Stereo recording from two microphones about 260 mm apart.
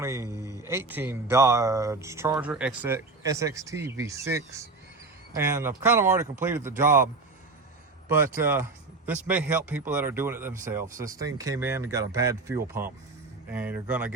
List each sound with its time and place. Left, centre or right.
0.0 s speech: centre
6.7 s speech: right
8.0 s speech: centre